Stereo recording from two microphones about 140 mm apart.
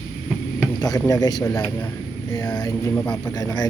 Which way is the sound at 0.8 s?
25° left (ahead or behind).